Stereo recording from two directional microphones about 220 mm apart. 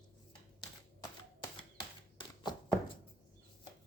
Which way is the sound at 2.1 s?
20° left (ahead or behind).